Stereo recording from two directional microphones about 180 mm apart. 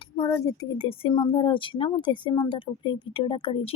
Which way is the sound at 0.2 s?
15° left (ahead or behind).